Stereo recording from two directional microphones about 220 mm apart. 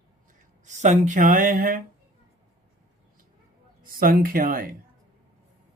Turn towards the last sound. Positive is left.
turn(degrees=-40)  # may be behind; listen again after turning